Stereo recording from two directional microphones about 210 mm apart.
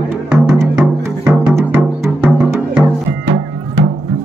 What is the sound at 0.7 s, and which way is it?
Music, 10° right (ahead or behind).